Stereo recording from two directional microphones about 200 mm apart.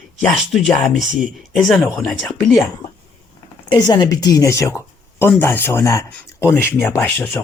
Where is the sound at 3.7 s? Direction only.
20° left (ahead or behind).